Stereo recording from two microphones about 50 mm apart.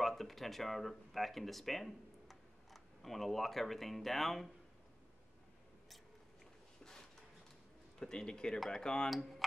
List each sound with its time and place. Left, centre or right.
0.0 s speech: centre
6.8 s a sound: centre
8.0 s speech: centre